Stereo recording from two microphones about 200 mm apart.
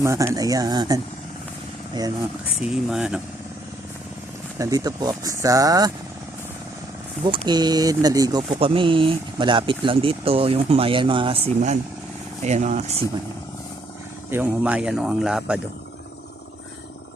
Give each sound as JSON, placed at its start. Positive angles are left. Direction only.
{"t": 0.0, "sound": "speech", "side_deg": -15}
{"t": 2.6, "sound": "speech", "side_deg": -5}
{"t": 4.5, "sound": "speech", "side_deg": -15}
{"t": 7.3, "sound": "speech", "side_deg": -20}
{"t": 14.3, "sound": "speech", "side_deg": -10}